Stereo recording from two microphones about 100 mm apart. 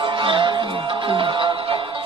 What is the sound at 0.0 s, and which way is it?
Music, 55° right (ahead or behind).